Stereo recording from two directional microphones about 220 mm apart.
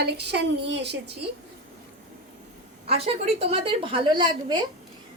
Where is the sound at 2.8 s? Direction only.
25° right (ahead or behind).